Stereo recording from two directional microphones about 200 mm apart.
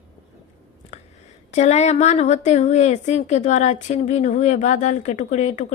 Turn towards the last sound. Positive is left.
turn(degrees=35)  # may be behind; listen again after turning